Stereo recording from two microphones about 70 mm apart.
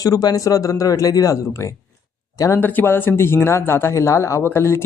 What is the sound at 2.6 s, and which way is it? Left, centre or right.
A man's voice, left.